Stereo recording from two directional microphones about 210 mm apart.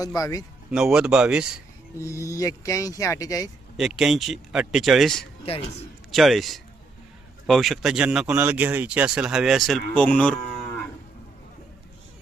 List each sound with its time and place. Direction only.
0.0 s speech: 15° left (ahead or behind)
0.7 s speech: 5° right (ahead or behind)
2.0 s speech: 15° left (ahead or behind)
3.8 s speech: centre (ahead or behind)